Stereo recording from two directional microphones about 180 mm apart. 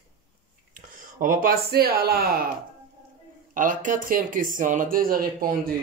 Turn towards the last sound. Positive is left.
turn(degrees=-50)  # may be behind; listen again after turning